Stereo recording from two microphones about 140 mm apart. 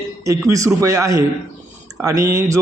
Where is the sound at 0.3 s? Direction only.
20° right (ahead or behind).